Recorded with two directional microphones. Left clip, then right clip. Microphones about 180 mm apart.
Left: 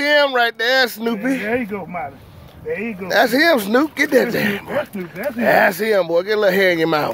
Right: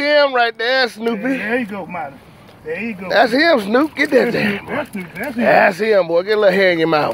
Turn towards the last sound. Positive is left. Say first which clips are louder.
# right 2 dB
turn(degrees=25)  # may be behind; listen again after turning